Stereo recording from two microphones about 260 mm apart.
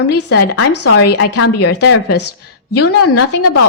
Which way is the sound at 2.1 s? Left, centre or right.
Left.